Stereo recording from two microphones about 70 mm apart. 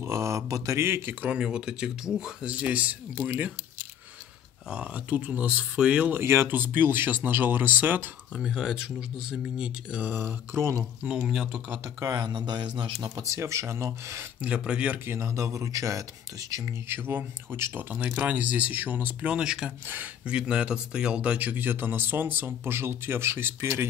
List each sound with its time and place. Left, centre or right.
0.0 s speech: right
0.7 s speech: right
1.3 s speech: centre
6.1 s speech: right
8.4 s speech: centre
10.0 s speech: right
11.1 s speech: centre
12.0 s speech: right
14.4 s speech: centre
15.1 s speech: right
16.9 s speech: right
17.9 s speech: centre
19.3 s speech: centre; by 23.9 s right